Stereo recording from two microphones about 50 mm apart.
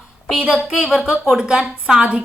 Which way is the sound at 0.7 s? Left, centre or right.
Centre.